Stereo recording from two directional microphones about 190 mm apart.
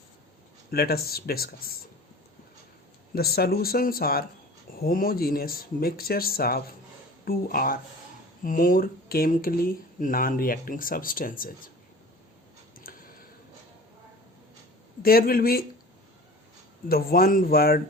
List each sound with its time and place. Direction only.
0.7 s speech: 55° left (ahead or behind)
3.2 s speech: 55° left (ahead or behind)
12.8 s a sound: 50° left (ahead or behind)
15.0 s speech: 50° left (ahead or behind)
16.9 s speech: 50° left (ahead or behind)